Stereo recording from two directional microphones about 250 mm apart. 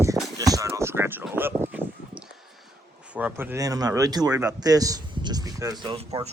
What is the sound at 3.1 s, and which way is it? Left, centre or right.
Speech, centre.